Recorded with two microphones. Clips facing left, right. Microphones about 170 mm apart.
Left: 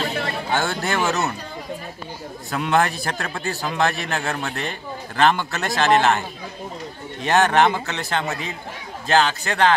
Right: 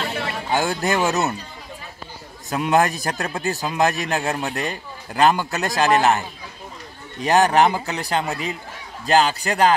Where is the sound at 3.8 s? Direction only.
40° right (ahead or behind).